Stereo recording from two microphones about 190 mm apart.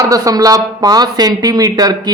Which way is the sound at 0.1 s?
20° right (ahead or behind).